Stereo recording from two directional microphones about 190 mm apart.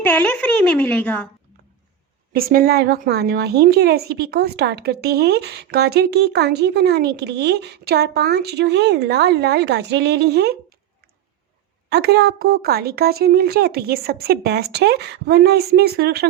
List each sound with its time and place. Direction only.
0.0 s a woman's voice: 10° left (ahead or behind)
2.3 s a woman's voice: 50° right (ahead or behind)
11.9 s a woman's voice: 60° right (ahead or behind)